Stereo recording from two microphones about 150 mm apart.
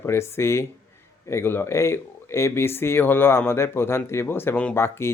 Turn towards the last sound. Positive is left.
turn(degrees=15)  # may be behind; listen again after turning